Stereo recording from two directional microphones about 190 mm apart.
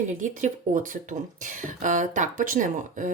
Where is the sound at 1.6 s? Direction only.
40° right (ahead or behind).